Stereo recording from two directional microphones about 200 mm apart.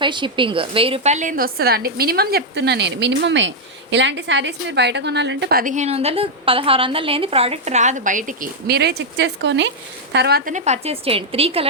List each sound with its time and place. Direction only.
0.0 s a woman's voice: 25° right (ahead or behind)